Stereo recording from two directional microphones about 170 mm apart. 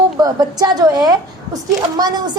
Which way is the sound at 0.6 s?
25° right (ahead or behind).